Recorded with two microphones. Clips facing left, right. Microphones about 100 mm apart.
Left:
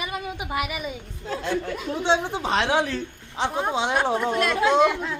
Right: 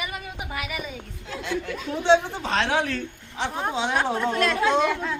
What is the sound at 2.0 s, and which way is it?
Speech, 15° left (ahead or behind).